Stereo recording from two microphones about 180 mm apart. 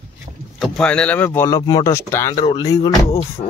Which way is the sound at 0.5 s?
Centre (ahead or behind).